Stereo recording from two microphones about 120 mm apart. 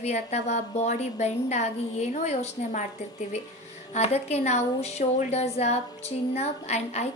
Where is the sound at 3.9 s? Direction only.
65° left (ahead or behind).